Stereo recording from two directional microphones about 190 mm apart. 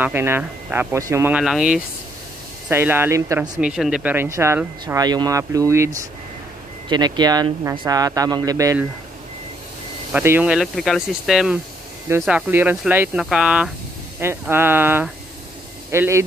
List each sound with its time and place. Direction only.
0.0 s speech: 10° right (ahead or behind)
3.5 s speech: 5° right (ahead or behind)
10.1 s speech: 10° right (ahead or behind)